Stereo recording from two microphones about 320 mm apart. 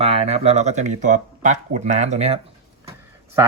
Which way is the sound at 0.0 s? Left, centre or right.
Centre.